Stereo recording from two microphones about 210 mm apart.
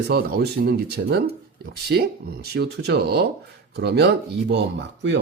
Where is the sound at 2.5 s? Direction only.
50° right (ahead or behind).